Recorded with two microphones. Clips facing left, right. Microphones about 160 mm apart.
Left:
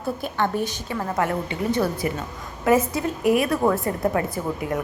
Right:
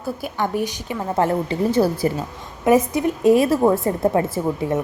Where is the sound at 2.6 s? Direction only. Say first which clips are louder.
Right 3 dB; 15° right (ahead or behind).